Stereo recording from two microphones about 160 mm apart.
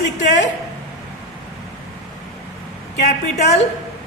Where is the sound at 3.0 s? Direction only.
45° left (ahead or behind).